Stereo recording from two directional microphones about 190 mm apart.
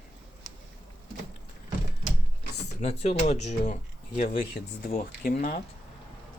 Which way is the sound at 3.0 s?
35° left (ahead or behind).